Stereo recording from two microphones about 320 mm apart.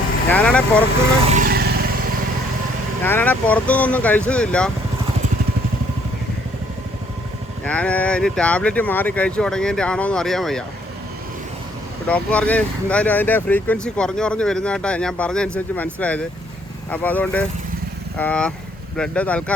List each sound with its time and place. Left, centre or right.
0.3 s speech: centre
1.2 s vehicle: right
3.0 s speech: centre
7.6 s speech: centre
12.0 s speech: centre